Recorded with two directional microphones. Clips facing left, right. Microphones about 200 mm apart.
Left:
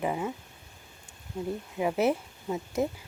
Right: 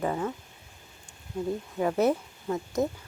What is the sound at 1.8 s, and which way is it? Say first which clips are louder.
Speech: right 1 dB; 10° left (ahead or behind).